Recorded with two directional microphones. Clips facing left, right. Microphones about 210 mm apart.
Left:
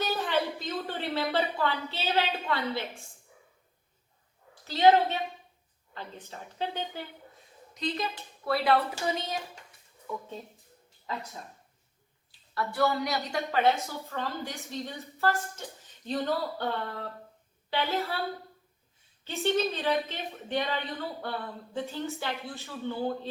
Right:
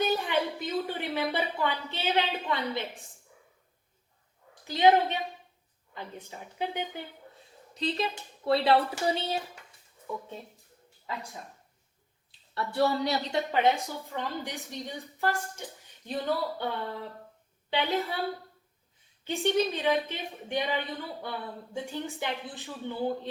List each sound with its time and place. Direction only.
0.0 s a woman's voice: 15° right (ahead or behind)
4.6 s a woman's voice: 15° right (ahead or behind)
7.7 s speech: 30° right (ahead or behind)
12.5 s a woman's voice: 30° right (ahead or behind)
19.2 s a woman's voice: 15° right (ahead or behind)